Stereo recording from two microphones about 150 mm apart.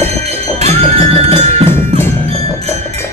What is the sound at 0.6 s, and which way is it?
Music, 45° right (ahead or behind).